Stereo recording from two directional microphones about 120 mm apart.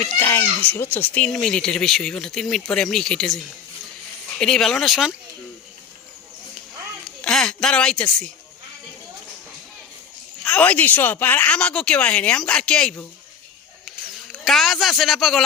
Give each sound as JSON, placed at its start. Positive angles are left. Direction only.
{"t": 0.1, "sound": "speech", "side_deg": 20}
{"t": 7.2, "sound": "speech", "side_deg": 5}
{"t": 10.4, "sound": "speech", "side_deg": 10}
{"t": 14.4, "sound": "speech", "side_deg": 0}